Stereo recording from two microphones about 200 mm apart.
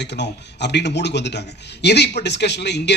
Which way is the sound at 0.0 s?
60° left (ahead or behind).